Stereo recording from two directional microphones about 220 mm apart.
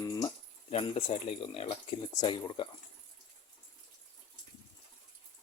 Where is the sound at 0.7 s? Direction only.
25° left (ahead or behind).